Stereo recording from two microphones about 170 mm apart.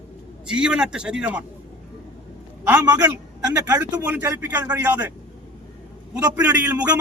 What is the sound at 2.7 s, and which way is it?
A man's voice, 10° right (ahead or behind).